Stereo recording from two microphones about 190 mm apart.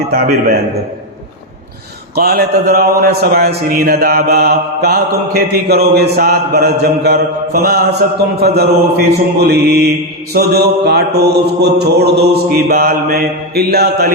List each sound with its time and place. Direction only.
0.1 s a man's voice: 55° right (ahead or behind)
2.1 s a man's voice: 55° right (ahead or behind)